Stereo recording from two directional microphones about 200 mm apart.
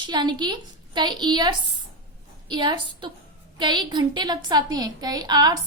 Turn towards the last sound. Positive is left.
turn(degrees=-20)  # may be behind; listen again after turning